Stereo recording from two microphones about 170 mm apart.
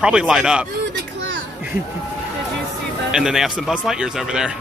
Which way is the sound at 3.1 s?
5° right (ahead or behind).